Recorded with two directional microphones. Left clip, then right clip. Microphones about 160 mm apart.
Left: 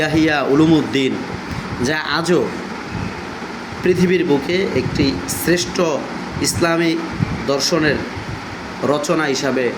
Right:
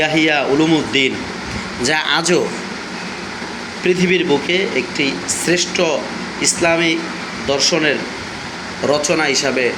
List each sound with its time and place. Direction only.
0.0 s speech: 40° left (ahead or behind)
1.8 s speech: 25° left (ahead or behind)
3.8 s speech: 35° left (ahead or behind)